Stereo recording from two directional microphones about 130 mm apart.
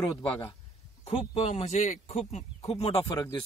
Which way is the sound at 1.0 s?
50° left (ahead or behind).